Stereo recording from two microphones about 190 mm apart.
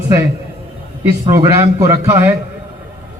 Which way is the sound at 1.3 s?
15° right (ahead or behind).